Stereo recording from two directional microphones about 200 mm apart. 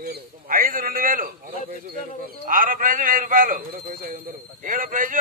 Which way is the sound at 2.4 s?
45° right (ahead or behind).